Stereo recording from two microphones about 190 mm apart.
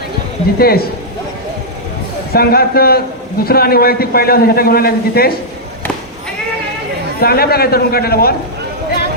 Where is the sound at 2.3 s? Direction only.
55° left (ahead or behind).